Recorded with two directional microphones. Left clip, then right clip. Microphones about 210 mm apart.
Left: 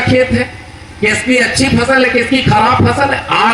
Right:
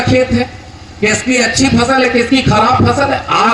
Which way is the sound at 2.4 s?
50° right (ahead or behind).